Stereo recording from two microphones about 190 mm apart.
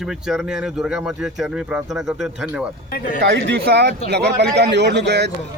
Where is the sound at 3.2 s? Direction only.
65° right (ahead or behind).